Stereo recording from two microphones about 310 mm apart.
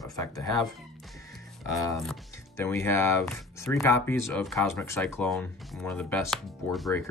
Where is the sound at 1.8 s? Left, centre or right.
Centre.